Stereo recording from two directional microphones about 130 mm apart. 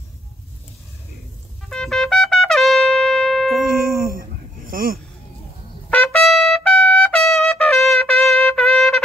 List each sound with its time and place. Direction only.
1.7 s trumpet: 5° left (ahead or behind)
3.6 s music: 90° right
5.9 s trumpet: 10° left (ahead or behind)
6.2 s trumpet: centre (ahead or behind)